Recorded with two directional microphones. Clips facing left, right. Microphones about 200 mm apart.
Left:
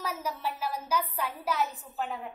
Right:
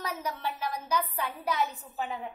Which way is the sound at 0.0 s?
5° left (ahead or behind).